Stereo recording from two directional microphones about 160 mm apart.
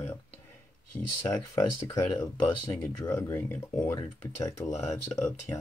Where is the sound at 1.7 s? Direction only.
20° left (ahead or behind).